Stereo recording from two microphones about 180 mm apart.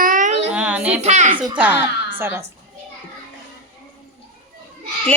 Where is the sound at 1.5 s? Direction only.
10° right (ahead or behind).